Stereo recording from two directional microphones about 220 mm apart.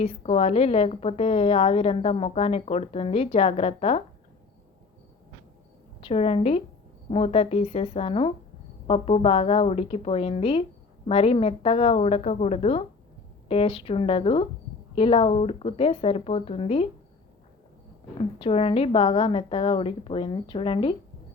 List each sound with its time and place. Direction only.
0.0 s a woman's voice: 25° left (ahead or behind)
6.0 s a woman's voice: 25° left (ahead or behind)
18.2 s a woman's voice: 25° left (ahead or behind)